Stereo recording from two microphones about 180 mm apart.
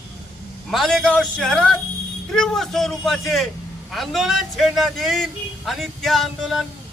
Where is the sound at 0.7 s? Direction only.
Centre (ahead or behind).